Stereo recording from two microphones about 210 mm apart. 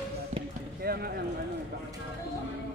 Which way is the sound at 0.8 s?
45° right (ahead or behind).